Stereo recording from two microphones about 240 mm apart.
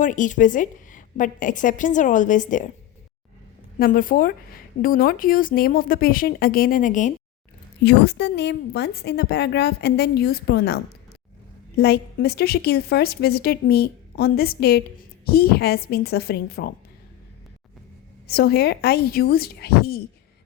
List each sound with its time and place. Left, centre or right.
0.0 s a woman's voice: left
3.8 s a woman's voice: left
7.9 s a woman's voice: left
11.8 s a woman's voice: left
18.3 s a woman's voice: left